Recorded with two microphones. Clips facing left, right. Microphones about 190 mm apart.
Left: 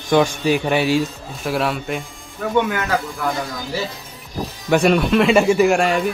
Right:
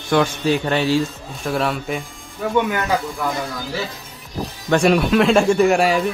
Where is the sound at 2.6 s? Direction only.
15° right (ahead or behind).